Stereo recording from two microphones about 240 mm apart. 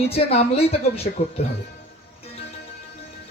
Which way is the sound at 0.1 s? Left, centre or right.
Left.